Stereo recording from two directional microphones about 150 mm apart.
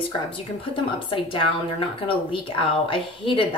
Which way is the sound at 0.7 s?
35° left (ahead or behind).